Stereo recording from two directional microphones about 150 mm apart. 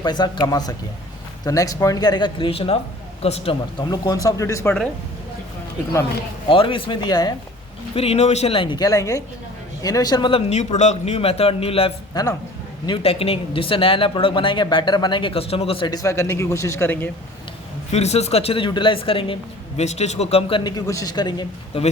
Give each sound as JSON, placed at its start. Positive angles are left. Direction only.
{"t": 0.0, "sound": "speech", "side_deg": 30}
{"t": 3.8, "sound": "speech", "side_deg": 25}
{"t": 6.5, "sound": "speech", "side_deg": 35}
{"t": 7.9, "sound": "speech", "side_deg": 45}
{"t": 10.5, "sound": "speech", "side_deg": 50}
{"t": 12.1, "sound": "speech", "side_deg": 25}
{"t": 12.8, "sound": "speech", "side_deg": 35}
{"t": 17.9, "sound": "speech", "side_deg": 45}
{"t": 20.7, "sound": "speech", "side_deg": 25}